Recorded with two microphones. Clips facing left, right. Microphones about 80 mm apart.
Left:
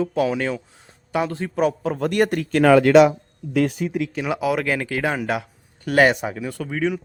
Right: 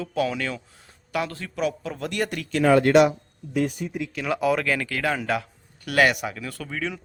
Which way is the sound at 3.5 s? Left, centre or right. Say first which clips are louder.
Left 5 dB; left.